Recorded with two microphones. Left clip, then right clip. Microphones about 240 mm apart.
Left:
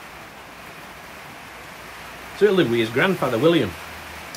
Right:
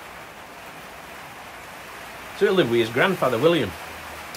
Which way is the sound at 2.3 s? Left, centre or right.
Centre.